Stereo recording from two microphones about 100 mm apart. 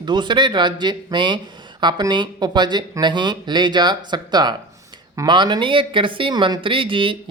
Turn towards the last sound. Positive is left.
turn(degrees=-60)  # may be behind; listen again after turning